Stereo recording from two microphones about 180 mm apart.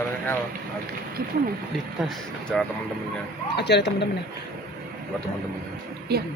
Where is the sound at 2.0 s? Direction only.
5° left (ahead or behind).